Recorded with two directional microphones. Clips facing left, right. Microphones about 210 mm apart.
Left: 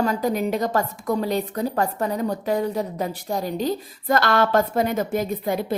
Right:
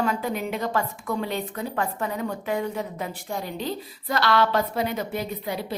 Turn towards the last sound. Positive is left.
turn(degrees=45)  # may be behind; listen again after turning